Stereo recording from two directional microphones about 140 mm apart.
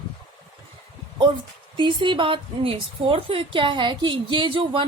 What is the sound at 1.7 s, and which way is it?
Speech, 35° right (ahead or behind).